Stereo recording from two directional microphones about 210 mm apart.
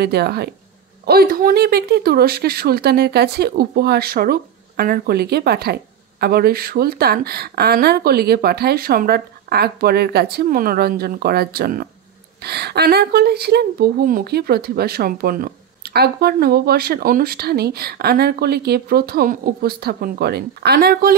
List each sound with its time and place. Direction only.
0.0 s speech: 50° right (ahead or behind)